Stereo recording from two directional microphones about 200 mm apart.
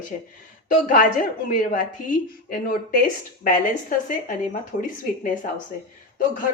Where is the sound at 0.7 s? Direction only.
40° left (ahead or behind).